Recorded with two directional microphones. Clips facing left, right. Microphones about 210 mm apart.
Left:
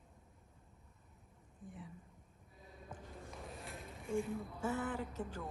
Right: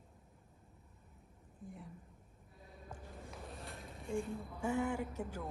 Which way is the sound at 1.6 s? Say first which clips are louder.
Right 1 dB; centre (ahead or behind).